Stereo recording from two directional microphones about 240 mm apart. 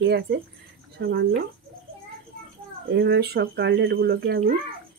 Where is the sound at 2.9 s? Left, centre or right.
Right.